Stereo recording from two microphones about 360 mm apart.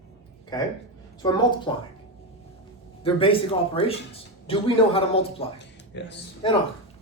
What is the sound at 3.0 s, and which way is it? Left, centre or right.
Speech, centre.